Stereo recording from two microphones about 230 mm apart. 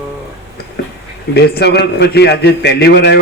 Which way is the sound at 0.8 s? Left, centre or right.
Left.